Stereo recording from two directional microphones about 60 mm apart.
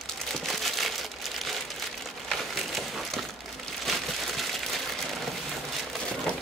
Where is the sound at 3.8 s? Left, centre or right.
Centre.